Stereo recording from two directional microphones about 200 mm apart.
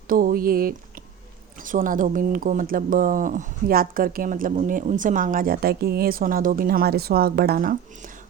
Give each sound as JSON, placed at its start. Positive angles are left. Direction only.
{"t": 0.1, "sound": "speech", "side_deg": -45}